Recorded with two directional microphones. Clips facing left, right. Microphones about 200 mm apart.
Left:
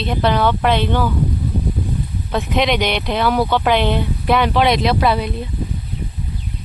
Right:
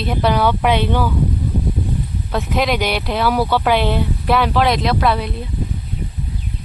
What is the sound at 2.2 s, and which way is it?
Speech, centre (ahead or behind).